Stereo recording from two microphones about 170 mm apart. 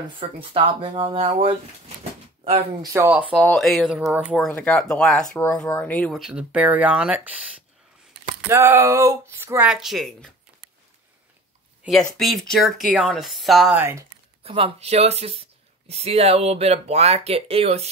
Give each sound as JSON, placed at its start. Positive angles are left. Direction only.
{"t": 0.2, "sound": "speech", "side_deg": -35}
{"t": 2.8, "sound": "speech", "side_deg": -15}
{"t": 3.3, "sound": "speech", "side_deg": 5}
{"t": 6.2, "sound": "speech", "side_deg": -5}
{"t": 11.8, "sound": "speech", "side_deg": 0}
{"t": 13.7, "sound": "speech", "side_deg": -15}
{"t": 14.4, "sound": "speech", "side_deg": -35}